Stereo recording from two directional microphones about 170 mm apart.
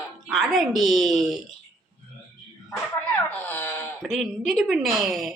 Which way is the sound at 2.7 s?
10° left (ahead or behind).